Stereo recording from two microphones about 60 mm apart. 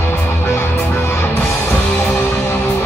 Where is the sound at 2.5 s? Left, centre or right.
Left.